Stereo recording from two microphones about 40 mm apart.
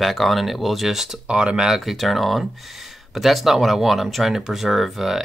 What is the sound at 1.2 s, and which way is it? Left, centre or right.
Speech, right.